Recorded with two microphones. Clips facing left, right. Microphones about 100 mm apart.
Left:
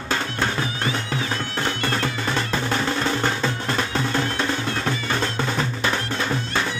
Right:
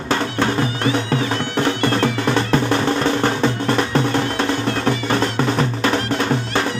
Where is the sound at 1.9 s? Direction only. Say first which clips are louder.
Right 7 dB; 60° right (ahead or behind).